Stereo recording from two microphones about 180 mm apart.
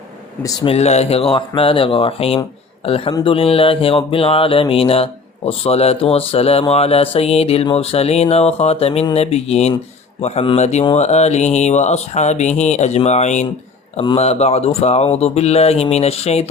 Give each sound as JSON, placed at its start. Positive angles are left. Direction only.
{"t": 0.4, "sound": "speech", "side_deg": 30}